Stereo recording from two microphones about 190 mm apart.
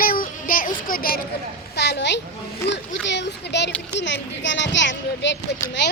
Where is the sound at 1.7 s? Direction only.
65° left (ahead or behind).